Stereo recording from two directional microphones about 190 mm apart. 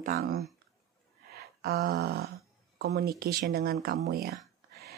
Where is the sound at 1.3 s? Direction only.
55° right (ahead or behind).